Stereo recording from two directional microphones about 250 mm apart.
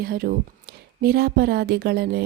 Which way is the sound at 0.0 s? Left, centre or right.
Right.